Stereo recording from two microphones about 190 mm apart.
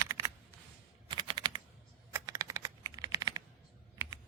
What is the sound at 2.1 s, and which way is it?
Computer keyboard, 15° right (ahead or behind).